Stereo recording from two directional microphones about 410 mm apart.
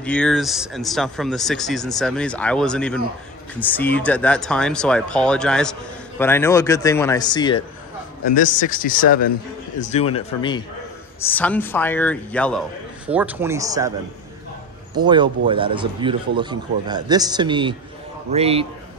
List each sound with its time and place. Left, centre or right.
0.0 s speech: centre
15.0 s speech: centre